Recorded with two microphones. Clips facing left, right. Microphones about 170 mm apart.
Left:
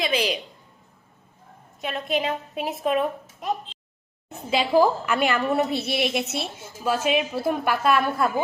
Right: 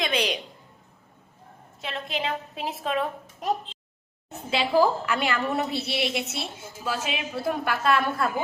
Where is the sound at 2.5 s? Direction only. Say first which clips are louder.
Left 5 dB; 15° left (ahead or behind).